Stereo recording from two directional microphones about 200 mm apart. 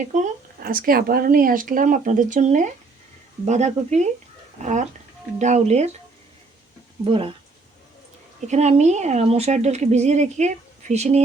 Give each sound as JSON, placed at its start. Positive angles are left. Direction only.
{"t": 0.1, "sound": "a woman's voice", "side_deg": -40}
{"t": 7.0, "sound": "speech", "side_deg": -25}
{"t": 8.4, "sound": "a woman's voice", "side_deg": -35}